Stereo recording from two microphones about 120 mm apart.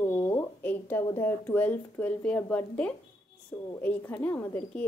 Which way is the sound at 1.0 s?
25° left (ahead or behind).